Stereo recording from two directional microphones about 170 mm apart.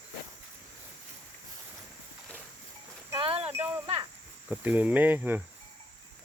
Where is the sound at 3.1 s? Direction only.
35° right (ahead or behind).